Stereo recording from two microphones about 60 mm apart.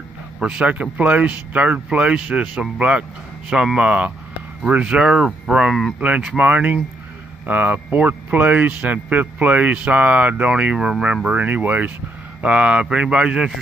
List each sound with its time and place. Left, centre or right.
0.4 s speech: centre
11.2 s speech: right